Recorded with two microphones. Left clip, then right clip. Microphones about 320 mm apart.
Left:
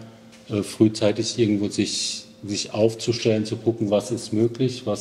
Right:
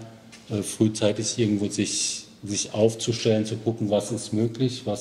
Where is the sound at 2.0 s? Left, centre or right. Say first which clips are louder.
Left 1 dB; left.